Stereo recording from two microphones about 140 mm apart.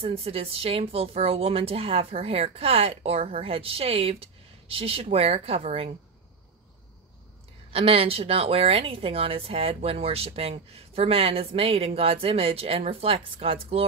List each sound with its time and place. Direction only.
0.0 s a woman's voice: 45° right (ahead or behind)
7.7 s a woman's voice: 45° right (ahead or behind)